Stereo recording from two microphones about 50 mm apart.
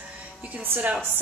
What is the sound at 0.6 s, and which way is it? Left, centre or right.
Speech, right.